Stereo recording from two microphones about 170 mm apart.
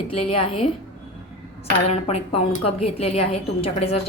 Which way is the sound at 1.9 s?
35° left (ahead or behind).